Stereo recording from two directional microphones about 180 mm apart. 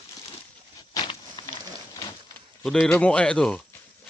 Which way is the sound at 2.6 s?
5° left (ahead or behind).